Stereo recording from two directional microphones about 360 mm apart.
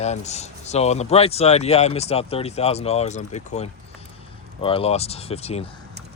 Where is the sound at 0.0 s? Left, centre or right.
Centre.